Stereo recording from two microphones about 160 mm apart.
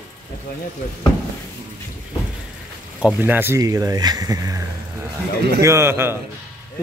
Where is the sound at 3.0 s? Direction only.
10° right (ahead or behind).